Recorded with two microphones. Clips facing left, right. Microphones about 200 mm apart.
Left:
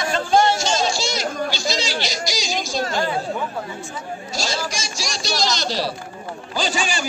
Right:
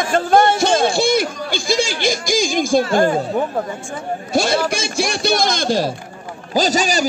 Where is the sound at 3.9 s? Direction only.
55° right (ahead or behind).